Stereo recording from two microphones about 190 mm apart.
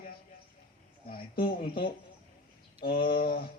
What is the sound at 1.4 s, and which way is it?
A man's voice, 50° left (ahead or behind).